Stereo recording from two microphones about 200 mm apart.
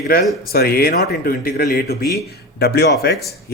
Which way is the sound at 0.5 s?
50° left (ahead or behind).